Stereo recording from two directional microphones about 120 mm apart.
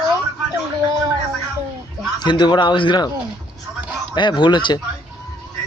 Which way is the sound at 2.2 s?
40° left (ahead or behind).